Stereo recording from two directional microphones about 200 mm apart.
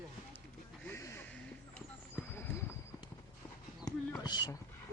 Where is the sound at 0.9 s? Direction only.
15° left (ahead or behind).